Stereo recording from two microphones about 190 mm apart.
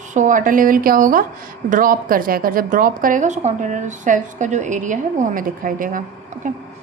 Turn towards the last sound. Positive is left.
turn(degrees=-45)  # may be behind; listen again after turning